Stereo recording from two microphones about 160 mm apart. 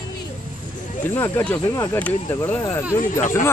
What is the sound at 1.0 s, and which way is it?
Speech, 15° left (ahead or behind).